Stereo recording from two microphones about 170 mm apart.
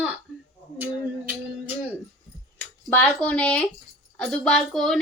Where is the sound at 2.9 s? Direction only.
10° left (ahead or behind).